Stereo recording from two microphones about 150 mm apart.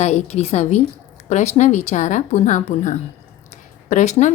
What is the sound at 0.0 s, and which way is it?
Speech, 45° left (ahead or behind).